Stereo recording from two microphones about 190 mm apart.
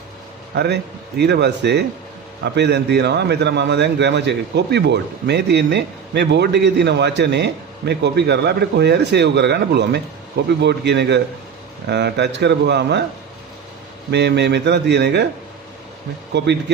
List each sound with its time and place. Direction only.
0.5 s a man's voice: 60° right (ahead or behind)
14.1 s a man's voice: 65° right (ahead or behind)
16.3 s a man's voice: 65° right (ahead or behind)